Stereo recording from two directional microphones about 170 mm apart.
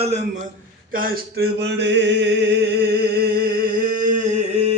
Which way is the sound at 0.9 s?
55° right (ahead or behind).